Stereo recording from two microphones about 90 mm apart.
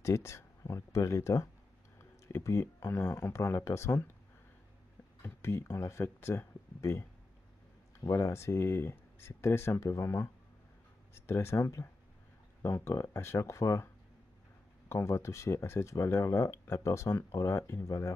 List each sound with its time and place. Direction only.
0.0 s speech: 30° left (ahead or behind)
5.2 s speech: 30° left (ahead or behind)
14.9 s speech: 30° left (ahead or behind)